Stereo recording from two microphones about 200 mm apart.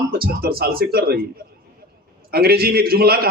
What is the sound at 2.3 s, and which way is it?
A woman's voice, 50° right (ahead or behind).